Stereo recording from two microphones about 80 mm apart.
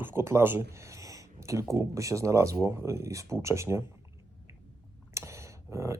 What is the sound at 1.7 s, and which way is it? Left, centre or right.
Speech, right.